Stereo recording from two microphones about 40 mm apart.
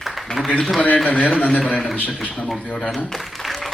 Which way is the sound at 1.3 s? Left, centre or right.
Left.